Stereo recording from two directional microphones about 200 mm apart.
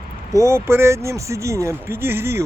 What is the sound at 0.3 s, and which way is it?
Speech, 15° right (ahead or behind).